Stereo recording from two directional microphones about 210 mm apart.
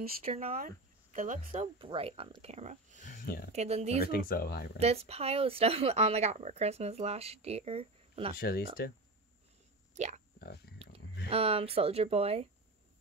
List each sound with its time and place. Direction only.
0.2 s speech: 30° right (ahead or behind)
0.6 s speech: 40° right (ahead or behind)
4.0 s speech: 45° left (ahead or behind)
4.7 s speech: 30° right (ahead or behind)
8.4 s speech: 45° left (ahead or behind)
9.9 s speech: 35° right (ahead or behind)
10.4 s speech: 50° left (ahead or behind)
11.2 s speech: 25° right (ahead or behind)